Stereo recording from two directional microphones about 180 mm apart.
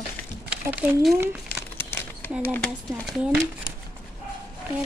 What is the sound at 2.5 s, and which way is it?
Speech, 5° left (ahead or behind).